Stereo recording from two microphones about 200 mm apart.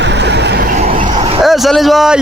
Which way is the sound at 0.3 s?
55° right (ahead or behind).